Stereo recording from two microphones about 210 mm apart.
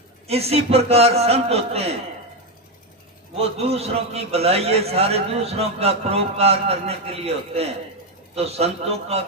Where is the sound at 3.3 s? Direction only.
30° right (ahead or behind).